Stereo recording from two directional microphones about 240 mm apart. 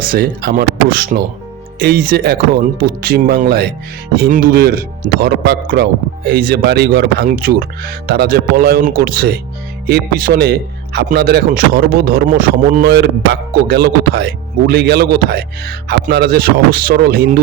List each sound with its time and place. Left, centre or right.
0.0 s speech: right